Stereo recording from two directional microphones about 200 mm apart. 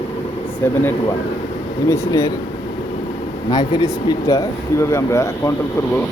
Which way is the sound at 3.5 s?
20° left (ahead or behind).